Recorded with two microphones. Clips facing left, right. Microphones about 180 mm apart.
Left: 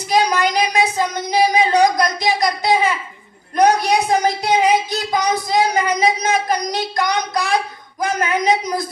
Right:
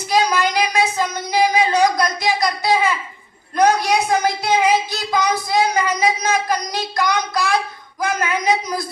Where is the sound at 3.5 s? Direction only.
20° left (ahead or behind).